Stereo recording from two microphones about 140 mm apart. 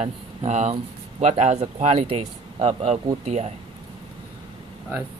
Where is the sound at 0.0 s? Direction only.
55° right (ahead or behind).